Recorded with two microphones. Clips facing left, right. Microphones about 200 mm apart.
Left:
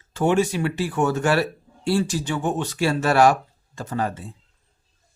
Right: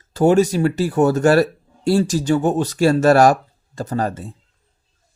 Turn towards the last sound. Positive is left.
turn(degrees=-40)  # may be behind; listen again after turning